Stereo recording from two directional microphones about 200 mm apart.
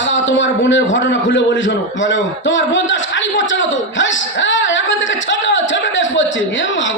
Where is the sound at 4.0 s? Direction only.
70° left (ahead or behind).